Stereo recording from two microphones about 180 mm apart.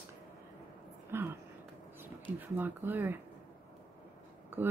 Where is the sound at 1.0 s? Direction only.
10° right (ahead or behind).